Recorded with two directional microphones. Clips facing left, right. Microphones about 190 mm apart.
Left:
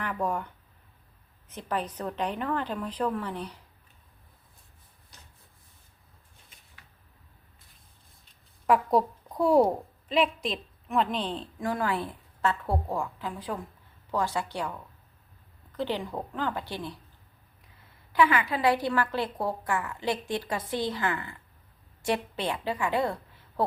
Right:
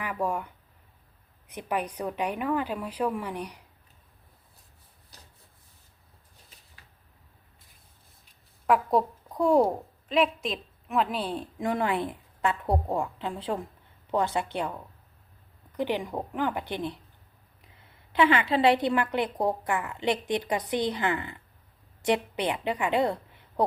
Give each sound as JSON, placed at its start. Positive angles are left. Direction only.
{"t": 0.0, "sound": "a woman's voice", "side_deg": -10}
{"t": 5.1, "sound": "rub", "side_deg": -35}
{"t": 8.6, "sound": "a woman's voice", "side_deg": 0}
{"t": 18.1, "sound": "a woman's voice", "side_deg": -25}